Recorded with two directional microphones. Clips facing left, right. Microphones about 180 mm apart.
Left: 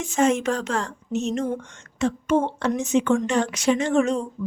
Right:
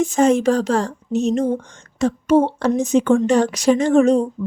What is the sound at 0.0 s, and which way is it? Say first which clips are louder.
A woman's voice: right 6 dB; 35° right (ahead or behind).